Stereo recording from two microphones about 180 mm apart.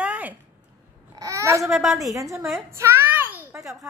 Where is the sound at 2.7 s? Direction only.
15° right (ahead or behind).